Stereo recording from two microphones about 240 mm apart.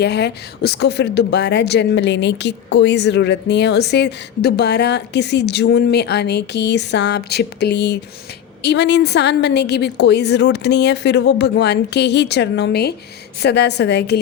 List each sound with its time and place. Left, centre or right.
0.0 s a woman's voice: left